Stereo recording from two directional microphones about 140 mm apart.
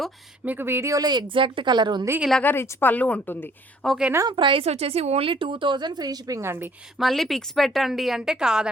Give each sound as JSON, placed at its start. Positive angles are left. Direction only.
{"t": 0.4, "sound": "speech", "side_deg": -15}
{"t": 2.4, "sound": "speech", "side_deg": 15}
{"t": 3.8, "sound": "speech", "side_deg": -5}
{"t": 4.3, "sound": "speech", "side_deg": -35}
{"t": 7.0, "sound": "speech", "side_deg": 0}